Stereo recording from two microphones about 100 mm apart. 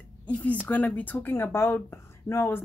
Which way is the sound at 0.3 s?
15° left (ahead or behind).